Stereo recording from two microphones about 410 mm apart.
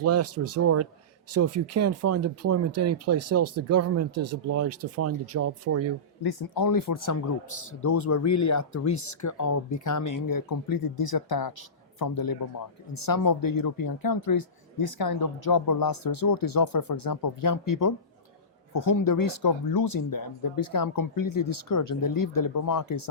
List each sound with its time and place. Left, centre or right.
0.0 s speech: right
6.2 s a man's voice: left